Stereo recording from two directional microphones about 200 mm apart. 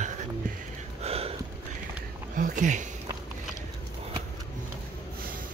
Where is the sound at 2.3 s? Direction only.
40° right (ahead or behind).